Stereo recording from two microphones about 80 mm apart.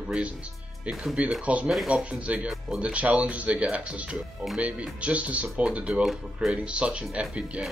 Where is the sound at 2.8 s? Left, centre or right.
Centre.